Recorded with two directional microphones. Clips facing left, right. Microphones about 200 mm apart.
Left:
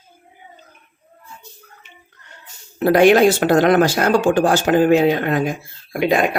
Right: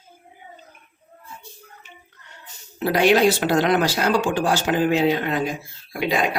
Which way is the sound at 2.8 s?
50° left (ahead or behind).